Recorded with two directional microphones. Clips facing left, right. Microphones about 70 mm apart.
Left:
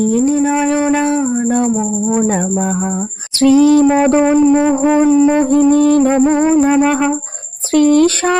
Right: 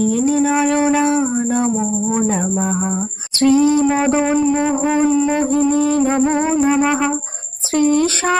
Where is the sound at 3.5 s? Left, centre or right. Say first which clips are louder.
Left 6 dB; left.